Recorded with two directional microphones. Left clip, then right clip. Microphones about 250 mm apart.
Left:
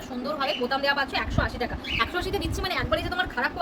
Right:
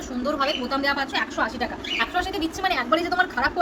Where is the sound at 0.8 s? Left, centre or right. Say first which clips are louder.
Right 1 dB; left.